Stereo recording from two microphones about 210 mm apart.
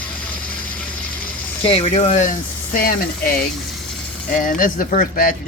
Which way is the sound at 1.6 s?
30° left (ahead or behind).